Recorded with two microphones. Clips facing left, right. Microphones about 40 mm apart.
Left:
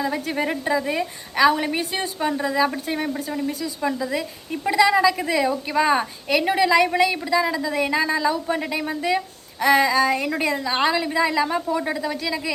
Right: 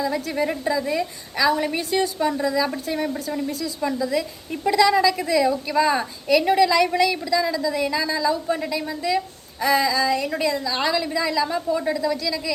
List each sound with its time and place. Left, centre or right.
0.0 s a woman's voice: left
1.7 s speech: left
3.1 s speech: centre
3.8 s a woman's voice: left